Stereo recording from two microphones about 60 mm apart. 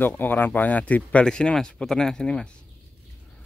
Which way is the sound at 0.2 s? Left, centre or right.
Left.